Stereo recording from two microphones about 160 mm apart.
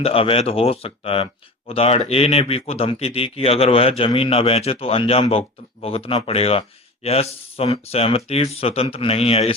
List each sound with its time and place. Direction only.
0.0 s speech: 35° left (ahead or behind)